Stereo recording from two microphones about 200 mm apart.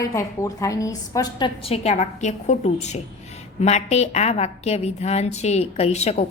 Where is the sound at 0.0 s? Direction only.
15° left (ahead or behind).